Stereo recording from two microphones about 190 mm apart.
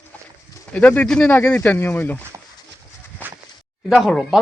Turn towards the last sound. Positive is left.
turn(degrees=0)  # may be behind; listen again after turning